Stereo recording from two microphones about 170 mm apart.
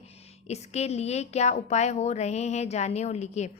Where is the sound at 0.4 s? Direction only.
40° left (ahead or behind).